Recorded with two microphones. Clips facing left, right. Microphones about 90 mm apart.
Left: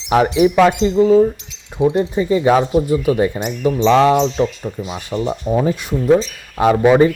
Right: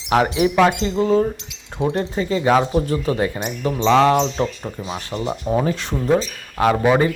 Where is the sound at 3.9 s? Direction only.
15° left (ahead or behind).